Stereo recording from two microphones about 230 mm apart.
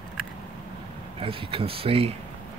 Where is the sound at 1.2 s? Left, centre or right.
Right.